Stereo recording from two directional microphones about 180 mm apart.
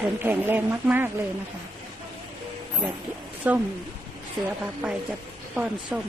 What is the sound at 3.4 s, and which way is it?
Speech, 10° right (ahead or behind).